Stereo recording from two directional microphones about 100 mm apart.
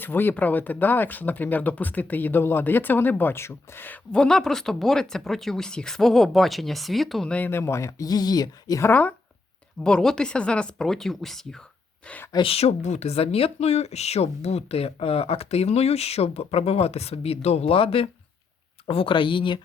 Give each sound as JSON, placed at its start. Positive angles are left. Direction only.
{"t": 0.0, "sound": "speech", "side_deg": 20}
{"t": 4.1, "sound": "speech", "side_deg": 5}
{"t": 7.3, "sound": "speech", "side_deg": 15}
{"t": 8.8, "sound": "speech", "side_deg": 15}
{"t": 9.8, "sound": "speech", "side_deg": 5}
{"t": 12.4, "sound": "speech", "side_deg": 80}